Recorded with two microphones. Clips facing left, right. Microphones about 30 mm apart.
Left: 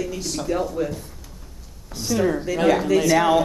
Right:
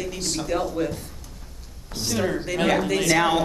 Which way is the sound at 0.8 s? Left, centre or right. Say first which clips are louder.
Left 1 dB; right.